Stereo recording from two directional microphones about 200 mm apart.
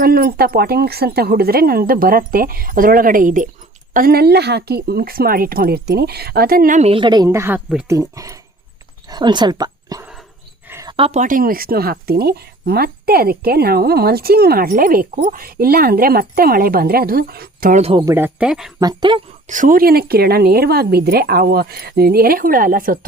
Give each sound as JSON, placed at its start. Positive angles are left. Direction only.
{"t": 0.0, "sound": "speech", "side_deg": -50}
{"t": 10.7, "sound": "a sound", "side_deg": -15}
{"t": 10.9, "sound": "speech", "side_deg": -30}
{"t": 17.9, "sound": "speech", "side_deg": -15}
{"t": 18.8, "sound": "speech", "side_deg": -20}
{"t": 19.5, "sound": "speech", "side_deg": -40}